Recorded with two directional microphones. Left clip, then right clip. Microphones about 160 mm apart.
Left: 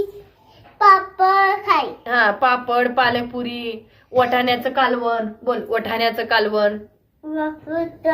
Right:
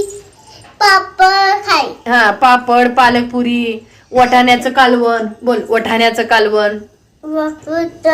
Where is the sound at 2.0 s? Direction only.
25° right (ahead or behind).